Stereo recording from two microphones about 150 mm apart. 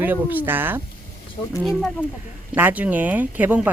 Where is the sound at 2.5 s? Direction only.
10° right (ahead or behind).